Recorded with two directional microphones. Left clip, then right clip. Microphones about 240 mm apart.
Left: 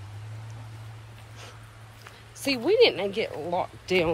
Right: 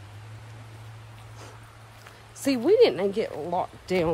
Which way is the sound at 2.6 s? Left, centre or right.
Right.